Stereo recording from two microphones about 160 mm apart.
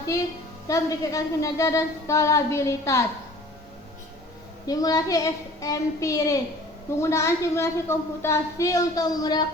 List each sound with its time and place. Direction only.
0.7 s a woman's voice: 20° left (ahead or behind)
4.6 s a woman's voice: 25° left (ahead or behind)